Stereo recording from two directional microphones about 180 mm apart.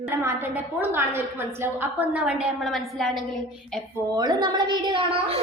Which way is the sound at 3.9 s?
20° right (ahead or behind).